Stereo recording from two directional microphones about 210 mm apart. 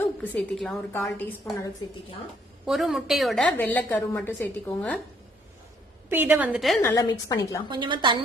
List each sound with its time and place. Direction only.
0.2 s a woman's voice: 5° left (ahead or behind)
2.6 s a woman's voice: centre (ahead or behind)
6.1 s a woman's voice: 10° right (ahead or behind)
6.8 s a woman's voice: 15° left (ahead or behind)
7.7 s a woman's voice: 25° right (ahead or behind)